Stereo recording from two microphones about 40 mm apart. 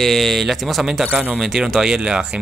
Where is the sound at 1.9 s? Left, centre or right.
Right.